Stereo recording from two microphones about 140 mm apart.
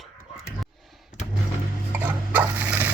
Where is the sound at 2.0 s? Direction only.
15° right (ahead or behind).